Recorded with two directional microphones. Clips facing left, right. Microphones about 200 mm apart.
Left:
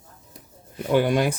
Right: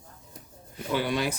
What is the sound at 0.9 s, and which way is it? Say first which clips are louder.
Speech: left 7 dB; 50° left (ahead or behind).